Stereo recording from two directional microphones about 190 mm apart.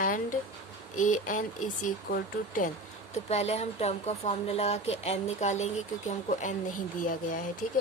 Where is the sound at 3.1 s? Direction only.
35° left (ahead or behind).